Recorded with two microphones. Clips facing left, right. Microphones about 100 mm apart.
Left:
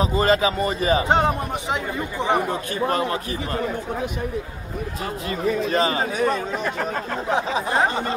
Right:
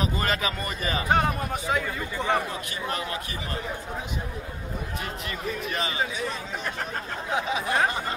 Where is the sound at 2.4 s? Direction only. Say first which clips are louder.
Left 8 dB; 45° left (ahead or behind).